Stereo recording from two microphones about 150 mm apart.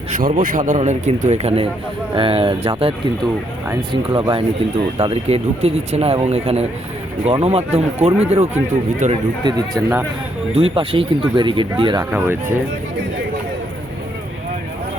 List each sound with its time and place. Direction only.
0.1 s a man's voice: 70° right (ahead or behind); by 2.9 s 40° right (ahead or behind)
4.1 s a man's voice: 35° right (ahead or behind)
9.4 s speech: 25° right (ahead or behind)
10.5 s a man's voice: 40° right (ahead or behind)
12.1 s speech: 15° right (ahead or behind)